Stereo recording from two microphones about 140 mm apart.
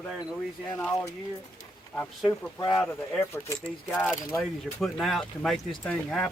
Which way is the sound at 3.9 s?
5° left (ahead or behind).